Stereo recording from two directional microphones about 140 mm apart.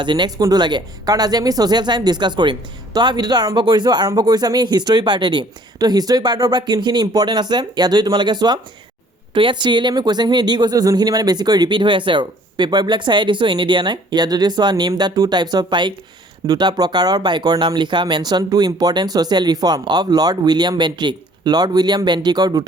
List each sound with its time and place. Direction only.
0.0 s speech: 35° right (ahead or behind)